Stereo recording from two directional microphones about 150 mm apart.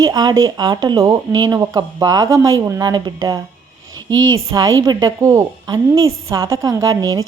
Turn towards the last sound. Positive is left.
turn(degrees=-25)  # may be behind; listen again after turning